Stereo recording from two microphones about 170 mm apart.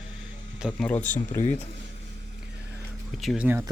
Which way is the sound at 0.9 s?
10° left (ahead or behind).